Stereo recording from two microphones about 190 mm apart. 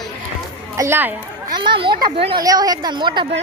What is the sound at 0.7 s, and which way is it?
Speech, 15° right (ahead or behind).